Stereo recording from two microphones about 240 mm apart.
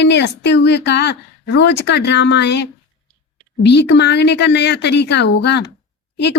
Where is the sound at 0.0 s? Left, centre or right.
Left.